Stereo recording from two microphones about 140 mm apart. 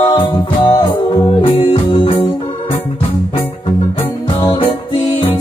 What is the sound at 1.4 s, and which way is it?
Music, 40° left (ahead or behind).